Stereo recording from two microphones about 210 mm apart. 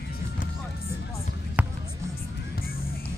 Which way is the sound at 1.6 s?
5° right (ahead or behind).